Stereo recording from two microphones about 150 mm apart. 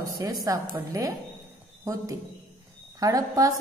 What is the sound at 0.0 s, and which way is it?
A woman's voice, 25° right (ahead or behind).